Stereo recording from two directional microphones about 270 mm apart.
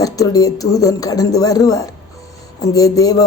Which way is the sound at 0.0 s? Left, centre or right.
Centre.